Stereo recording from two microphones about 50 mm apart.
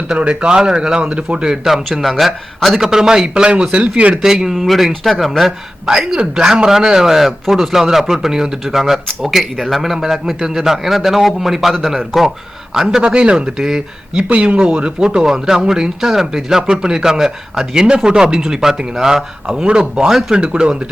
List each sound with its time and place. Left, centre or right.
0.1 s speech: right; by 2.8 s centre
2.8 s speech: centre
4.1 s a man's voice: centre
5.8 s a man's voice: centre
20.1 s speech: centre
20.4 s speech: centre